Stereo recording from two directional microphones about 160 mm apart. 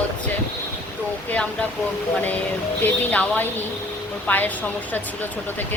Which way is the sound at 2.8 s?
10° left (ahead or behind).